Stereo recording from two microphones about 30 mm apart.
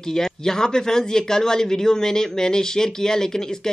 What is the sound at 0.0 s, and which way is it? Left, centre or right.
Speech, centre.